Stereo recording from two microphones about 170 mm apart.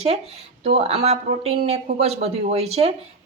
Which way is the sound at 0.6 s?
35° right (ahead or behind).